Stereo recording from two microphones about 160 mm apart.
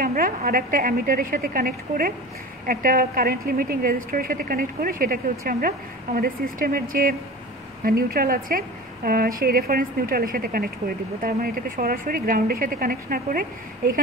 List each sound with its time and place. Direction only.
0.0 s a woman's voice: 65° right (ahead or behind)